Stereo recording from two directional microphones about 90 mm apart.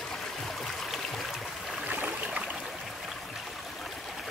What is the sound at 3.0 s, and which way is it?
Stream, centre (ahead or behind).